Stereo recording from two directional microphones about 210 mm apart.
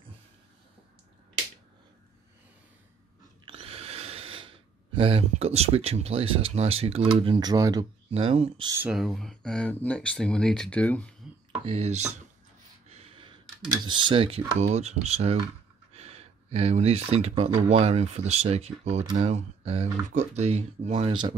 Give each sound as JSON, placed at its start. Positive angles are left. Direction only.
{"t": 3.4, "sound": "a sound", "side_deg": -25}
{"t": 7.2, "sound": "speech", "side_deg": -20}
{"t": 8.1, "sound": "speech", "side_deg": -30}
{"t": 8.8, "sound": "speech", "side_deg": 0}
{"t": 11.6, "sound": "speech", "side_deg": -30}
{"t": 12.9, "sound": "gasp", "side_deg": -25}
{"t": 13.8, "sound": "speech", "side_deg": -20}